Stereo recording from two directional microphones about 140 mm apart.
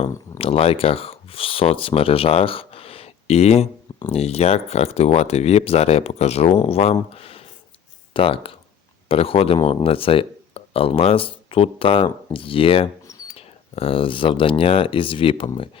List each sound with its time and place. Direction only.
0.3 s speech: 45° left (ahead or behind)